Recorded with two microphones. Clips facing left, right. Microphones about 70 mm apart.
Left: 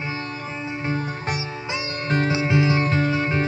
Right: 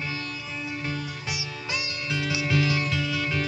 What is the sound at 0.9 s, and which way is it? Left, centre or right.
Music, left.